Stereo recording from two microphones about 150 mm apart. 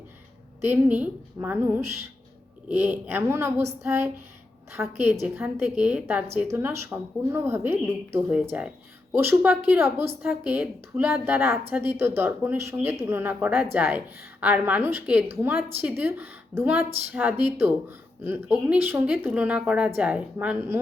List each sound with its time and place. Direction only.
0.6 s a woman's voice: 10° right (ahead or behind)